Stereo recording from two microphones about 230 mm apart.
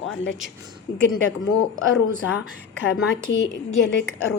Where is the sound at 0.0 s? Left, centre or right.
Left.